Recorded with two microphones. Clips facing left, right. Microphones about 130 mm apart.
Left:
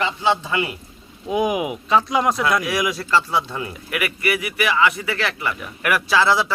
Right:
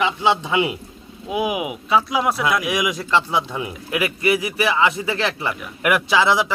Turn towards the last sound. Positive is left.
turn(degrees=-15)  # may be behind; listen again after turning